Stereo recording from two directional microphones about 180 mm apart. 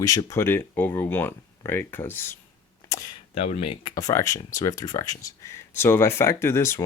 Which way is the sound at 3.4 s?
35° left (ahead or behind).